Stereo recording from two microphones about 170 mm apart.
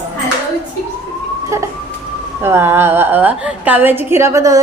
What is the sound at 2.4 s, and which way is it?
A woman's voice, 15° right (ahead or behind).